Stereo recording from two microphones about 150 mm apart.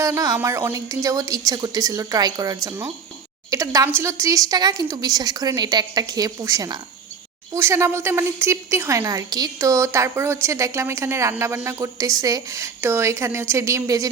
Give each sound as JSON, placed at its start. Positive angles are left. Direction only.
{"t": 0.0, "sound": "a woman's voice", "side_deg": -25}